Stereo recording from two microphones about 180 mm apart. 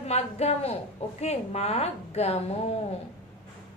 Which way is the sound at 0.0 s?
35° left (ahead or behind).